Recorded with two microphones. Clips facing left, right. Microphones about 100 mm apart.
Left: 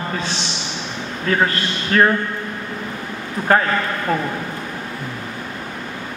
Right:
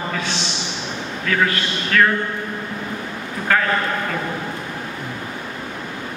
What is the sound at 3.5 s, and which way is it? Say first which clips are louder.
Speech: left 4 dB; 35° left (ahead or behind).